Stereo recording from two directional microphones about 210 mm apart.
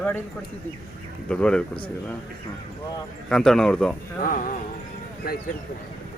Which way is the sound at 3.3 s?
5° left (ahead or behind).